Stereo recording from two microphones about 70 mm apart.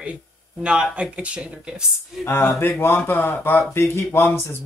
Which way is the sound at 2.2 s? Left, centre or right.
Left.